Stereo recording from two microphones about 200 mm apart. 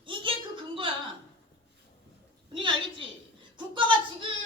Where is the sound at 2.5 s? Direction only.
25° right (ahead or behind).